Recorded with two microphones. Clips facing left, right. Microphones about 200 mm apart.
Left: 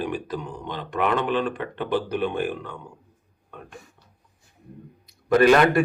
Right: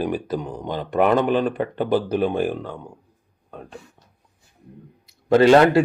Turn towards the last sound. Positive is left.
turn(degrees=-25)  # may be behind; listen again after turning